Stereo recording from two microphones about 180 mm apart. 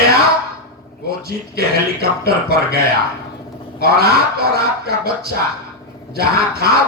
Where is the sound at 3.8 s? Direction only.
60° right (ahead or behind).